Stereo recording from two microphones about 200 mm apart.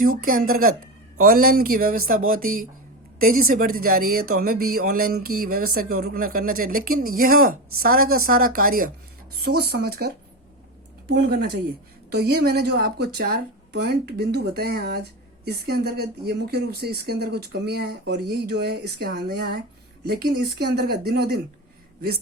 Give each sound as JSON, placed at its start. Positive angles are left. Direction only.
{"t": 0.0, "sound": "a woman's voice", "side_deg": -45}
{"t": 11.1, "sound": "a woman's voice", "side_deg": -50}